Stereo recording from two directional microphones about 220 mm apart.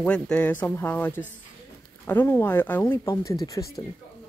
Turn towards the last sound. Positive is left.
turn(degrees=15)  # may be behind; listen again after turning